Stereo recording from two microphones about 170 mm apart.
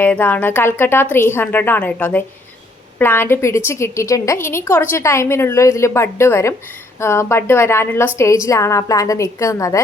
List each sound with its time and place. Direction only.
0.0 s a woman's voice: 10° left (ahead or behind)